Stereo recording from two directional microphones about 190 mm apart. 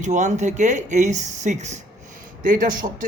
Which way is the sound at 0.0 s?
40° right (ahead or behind).